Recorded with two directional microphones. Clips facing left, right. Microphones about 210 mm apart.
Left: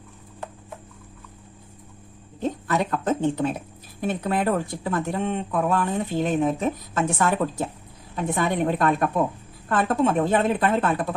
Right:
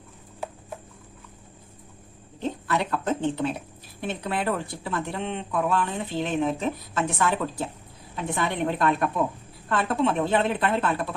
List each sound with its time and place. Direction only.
2.4 s speech: 45° left (ahead or behind)